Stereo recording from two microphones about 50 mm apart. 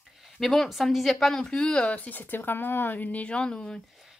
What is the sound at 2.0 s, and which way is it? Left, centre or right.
Speech, left.